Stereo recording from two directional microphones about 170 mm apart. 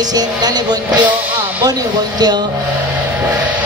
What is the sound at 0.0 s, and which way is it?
Music, 25° right (ahead or behind).